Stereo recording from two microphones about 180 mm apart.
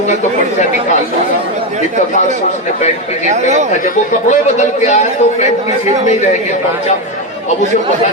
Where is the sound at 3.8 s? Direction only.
40° left (ahead or behind).